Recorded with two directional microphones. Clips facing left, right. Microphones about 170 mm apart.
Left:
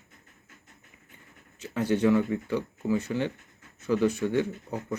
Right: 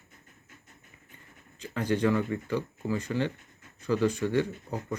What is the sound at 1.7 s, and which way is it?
Speech, 10° left (ahead or behind).